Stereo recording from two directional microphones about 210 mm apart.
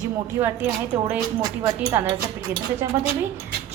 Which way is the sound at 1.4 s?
15° right (ahead or behind).